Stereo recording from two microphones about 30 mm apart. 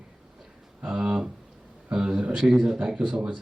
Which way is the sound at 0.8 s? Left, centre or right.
Right.